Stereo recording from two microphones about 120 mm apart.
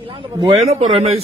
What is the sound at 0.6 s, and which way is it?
Speech, 60° right (ahead or behind).